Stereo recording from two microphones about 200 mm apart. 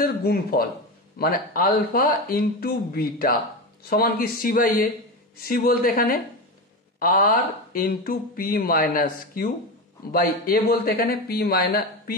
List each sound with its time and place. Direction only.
0.0 s speech: 50° left (ahead or behind)